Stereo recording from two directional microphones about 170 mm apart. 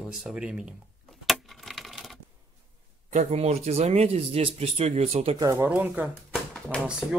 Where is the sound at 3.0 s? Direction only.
45° right (ahead or behind).